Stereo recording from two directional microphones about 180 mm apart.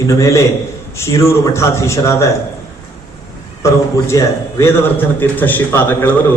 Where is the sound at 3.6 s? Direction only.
15° left (ahead or behind).